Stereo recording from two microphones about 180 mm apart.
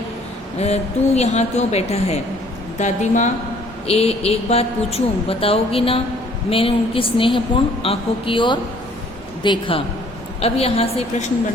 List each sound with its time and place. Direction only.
0.6 s a woman's voice: 35° left (ahead or behind)